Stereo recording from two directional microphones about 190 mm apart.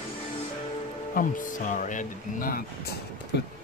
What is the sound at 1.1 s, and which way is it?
Speech, 45° left (ahead or behind).